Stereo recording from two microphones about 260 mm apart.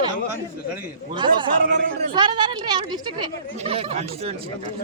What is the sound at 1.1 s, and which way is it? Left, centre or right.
Speech, centre.